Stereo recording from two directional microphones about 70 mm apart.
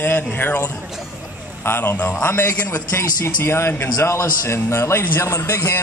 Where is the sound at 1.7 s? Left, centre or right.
Left.